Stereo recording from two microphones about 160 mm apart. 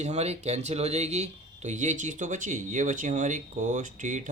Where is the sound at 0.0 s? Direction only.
45° right (ahead or behind).